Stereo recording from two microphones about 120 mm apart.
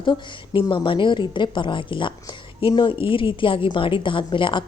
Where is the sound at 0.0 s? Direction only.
45° left (ahead or behind).